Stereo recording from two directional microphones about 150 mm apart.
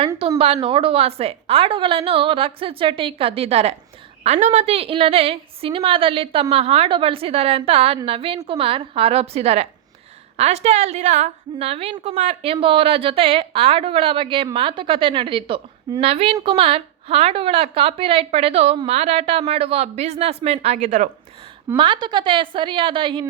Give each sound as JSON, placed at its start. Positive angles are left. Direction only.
{"t": 0.2, "sound": "a woman's voice", "side_deg": -40}
{"t": 20.7, "sound": "speech", "side_deg": -60}
{"t": 21.8, "sound": "a woman's voice", "side_deg": -30}